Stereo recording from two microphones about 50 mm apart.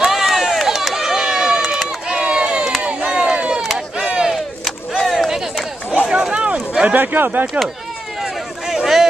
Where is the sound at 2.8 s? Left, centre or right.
Right.